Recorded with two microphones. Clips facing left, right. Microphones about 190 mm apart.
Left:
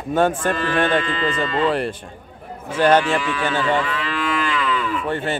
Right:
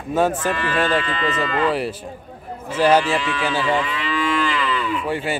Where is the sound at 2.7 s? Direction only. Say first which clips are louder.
Even; 5° right (ahead or behind).